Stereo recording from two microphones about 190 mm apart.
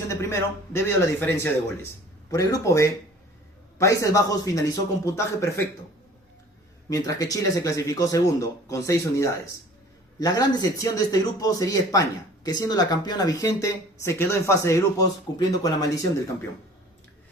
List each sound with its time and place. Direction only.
0.1 s speech: 15° left (ahead or behind)
6.9 s a man's voice: 20° left (ahead or behind)